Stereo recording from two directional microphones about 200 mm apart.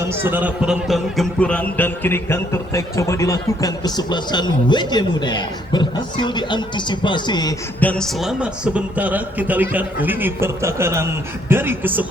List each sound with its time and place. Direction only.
0.0 s a man's voice: 10° right (ahead or behind); by 7.5 s 20° left (ahead or behind)
7.8 s a man's voice: 5° left (ahead or behind)